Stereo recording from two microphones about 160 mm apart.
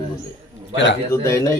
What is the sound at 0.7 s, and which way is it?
Speech, 90° left.